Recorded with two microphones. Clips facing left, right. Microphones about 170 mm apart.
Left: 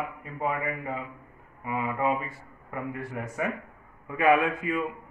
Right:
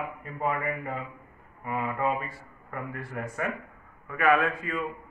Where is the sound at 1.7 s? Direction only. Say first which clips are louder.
Left 1 dB; 10° left (ahead or behind).